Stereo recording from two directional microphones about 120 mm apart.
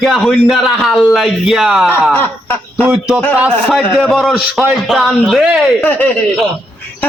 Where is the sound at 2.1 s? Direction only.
15° left (ahead or behind).